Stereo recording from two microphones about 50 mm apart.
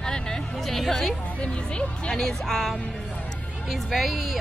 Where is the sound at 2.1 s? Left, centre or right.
Centre.